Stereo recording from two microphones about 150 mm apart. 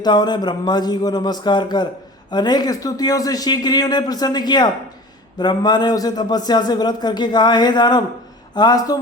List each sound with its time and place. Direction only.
0.0 s a man's voice: 30° left (ahead or behind)